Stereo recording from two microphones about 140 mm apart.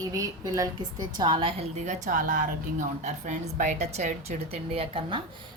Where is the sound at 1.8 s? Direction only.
60° right (ahead or behind).